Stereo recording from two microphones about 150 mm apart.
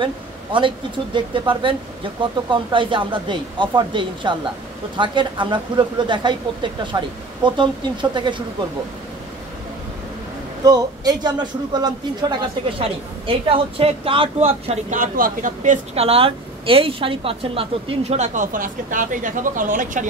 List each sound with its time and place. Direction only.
0.0 s speech: 35° right (ahead or behind)
10.6 s a man's voice: 25° right (ahead or behind); by 14.8 s 40° right (ahead or behind)
14.9 s speech: 65° right (ahead or behind)
15.9 s a woman's voice: 40° right (ahead or behind); by 20.1 s 60° right (ahead or behind)